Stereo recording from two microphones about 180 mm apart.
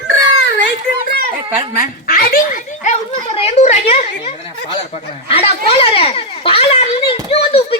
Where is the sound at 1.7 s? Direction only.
55° left (ahead or behind).